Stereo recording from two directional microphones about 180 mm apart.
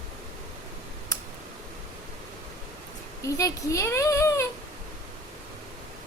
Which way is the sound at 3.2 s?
15° left (ahead or behind).